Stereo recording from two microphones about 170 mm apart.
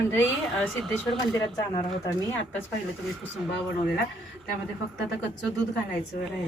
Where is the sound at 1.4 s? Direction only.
25° left (ahead or behind).